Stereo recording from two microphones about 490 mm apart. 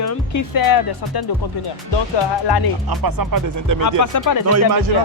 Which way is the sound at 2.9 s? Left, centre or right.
Right.